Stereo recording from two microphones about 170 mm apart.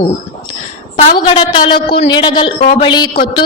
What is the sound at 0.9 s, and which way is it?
A man's voice, 30° left (ahead or behind).